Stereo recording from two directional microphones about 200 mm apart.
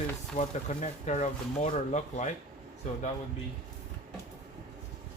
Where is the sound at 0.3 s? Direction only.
35° left (ahead or behind).